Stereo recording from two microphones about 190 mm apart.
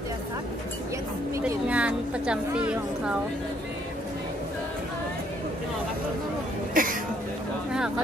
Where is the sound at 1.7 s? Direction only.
5° right (ahead or behind).